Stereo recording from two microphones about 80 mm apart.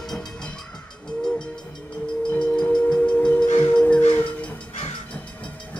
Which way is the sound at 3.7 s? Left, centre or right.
Centre.